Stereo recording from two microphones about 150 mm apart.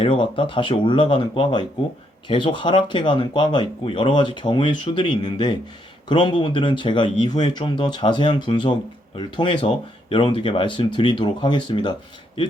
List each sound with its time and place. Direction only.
0.0 s speech: 35° left (ahead or behind)